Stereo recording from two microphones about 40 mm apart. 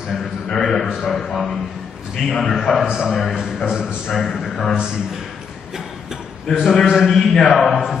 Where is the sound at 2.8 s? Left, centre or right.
Right.